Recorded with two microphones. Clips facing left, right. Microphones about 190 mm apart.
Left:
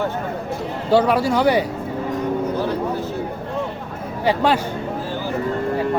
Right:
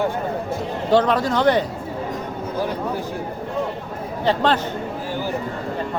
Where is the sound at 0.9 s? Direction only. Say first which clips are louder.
Left 1 dB; 10° left (ahead or behind).